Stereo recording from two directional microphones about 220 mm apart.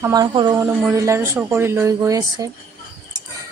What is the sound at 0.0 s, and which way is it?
Speech, 15° right (ahead or behind).